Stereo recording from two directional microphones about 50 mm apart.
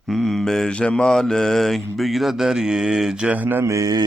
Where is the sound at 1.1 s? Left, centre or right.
Centre.